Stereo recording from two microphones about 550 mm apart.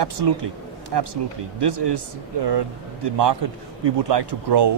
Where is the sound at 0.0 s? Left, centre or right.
Right.